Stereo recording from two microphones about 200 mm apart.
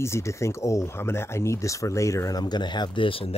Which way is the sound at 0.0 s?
15° left (ahead or behind).